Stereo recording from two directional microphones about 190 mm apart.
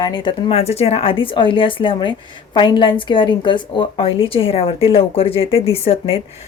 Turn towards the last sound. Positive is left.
turn(degrees=30)  # may be behind; listen again after turning